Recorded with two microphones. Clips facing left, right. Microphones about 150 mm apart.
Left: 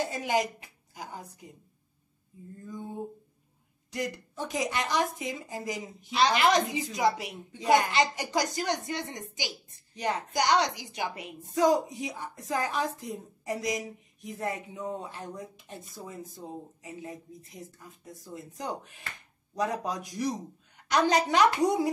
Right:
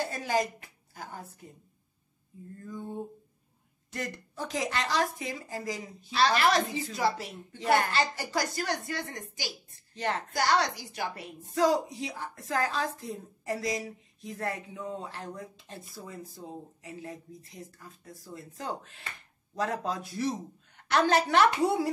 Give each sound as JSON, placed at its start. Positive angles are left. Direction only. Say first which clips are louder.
{"t": 0.0, "sound": "a woman's voice", "louder": "left 1 dB", "side_deg": 20}
{"t": 3.9, "sound": "a woman's voice", "louder": "left 3 dB", "side_deg": 20}